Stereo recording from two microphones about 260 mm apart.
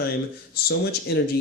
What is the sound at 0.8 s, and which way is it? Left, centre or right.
Speech, left.